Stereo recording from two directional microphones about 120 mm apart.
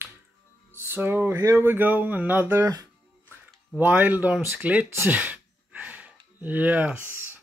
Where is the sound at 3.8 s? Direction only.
15° right (ahead or behind).